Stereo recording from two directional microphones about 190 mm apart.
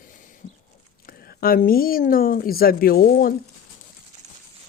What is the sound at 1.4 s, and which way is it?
Speech, 50° left (ahead or behind).